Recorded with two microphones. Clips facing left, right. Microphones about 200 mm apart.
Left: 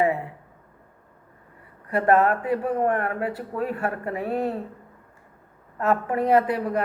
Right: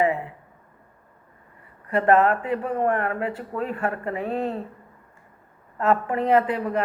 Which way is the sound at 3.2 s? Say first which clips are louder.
Even; 10° left (ahead or behind).